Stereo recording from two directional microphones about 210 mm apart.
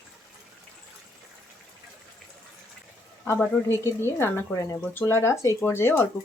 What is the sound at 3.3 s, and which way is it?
Speech, 10° left (ahead or behind).